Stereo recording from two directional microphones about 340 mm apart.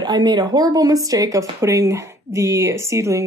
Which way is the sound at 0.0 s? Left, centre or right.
Centre.